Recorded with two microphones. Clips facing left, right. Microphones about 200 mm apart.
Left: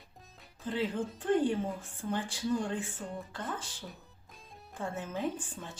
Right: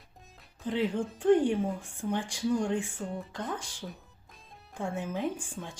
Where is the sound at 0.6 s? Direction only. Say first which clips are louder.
Right 3 dB; 15° right (ahead or behind).